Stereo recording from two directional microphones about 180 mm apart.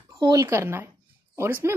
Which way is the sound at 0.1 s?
20° right (ahead or behind).